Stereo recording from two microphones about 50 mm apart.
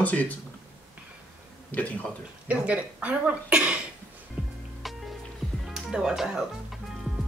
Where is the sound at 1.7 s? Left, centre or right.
Left.